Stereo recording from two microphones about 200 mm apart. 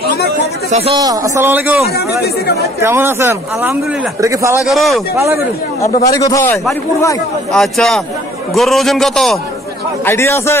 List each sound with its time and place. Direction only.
0.7 s a man's voice: 35° right (ahead or behind)
0.9 s a man's voice: 20° right (ahead or behind)
2.0 s speech: 55° left (ahead or behind)
2.8 s a man's voice: 10° right (ahead or behind)
4.6 s a man's voice: centre (ahead or behind)
5.1 s a man's voice: 15° right (ahead or behind)
6.1 s a man's voice: 15° left (ahead or behind)
7.5 s a man's voice: centre (ahead or behind)
10.0 s a man's voice: 10° left (ahead or behind)